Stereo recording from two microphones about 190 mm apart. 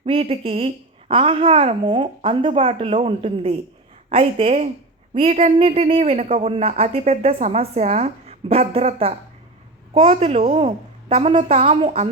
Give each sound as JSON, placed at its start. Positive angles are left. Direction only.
{"t": 0.0, "sound": "a woman's voice", "side_deg": -30}